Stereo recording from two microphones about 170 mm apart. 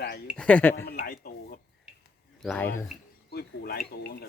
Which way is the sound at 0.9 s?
55° left (ahead or behind).